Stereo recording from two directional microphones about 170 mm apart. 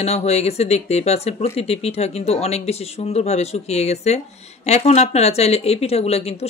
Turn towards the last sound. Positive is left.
turn(degrees=40)  # may be behind; listen again after turning